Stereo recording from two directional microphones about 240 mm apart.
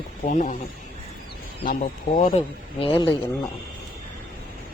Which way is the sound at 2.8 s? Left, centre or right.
Left.